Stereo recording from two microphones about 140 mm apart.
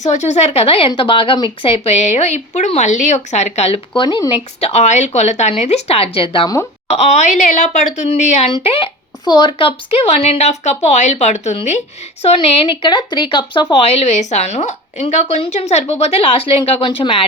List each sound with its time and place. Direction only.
0.0 s speech: 55° left (ahead or behind)
4.0 s speech: 35° left (ahead or behind)
4.6 s speech: 50° left (ahead or behind)
6.9 s speech: 55° left (ahead or behind)
8.5 s speech: 40° left (ahead or behind)
12.2 s speech: 40° left (ahead or behind)
13.8 s speech: 50° left (ahead or behind)